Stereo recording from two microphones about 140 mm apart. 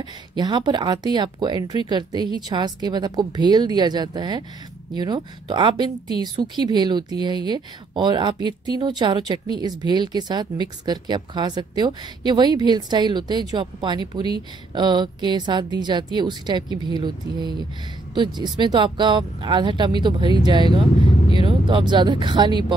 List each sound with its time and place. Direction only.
0.4 s speech: 30° right (ahead or behind)